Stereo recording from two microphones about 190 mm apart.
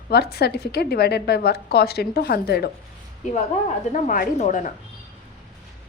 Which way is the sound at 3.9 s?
40° left (ahead or behind).